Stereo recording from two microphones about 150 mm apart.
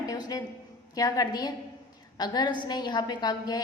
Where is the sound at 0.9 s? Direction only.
25° left (ahead or behind).